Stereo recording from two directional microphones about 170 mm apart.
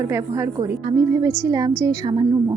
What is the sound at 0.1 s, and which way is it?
A woman's voice, 15° right (ahead or behind).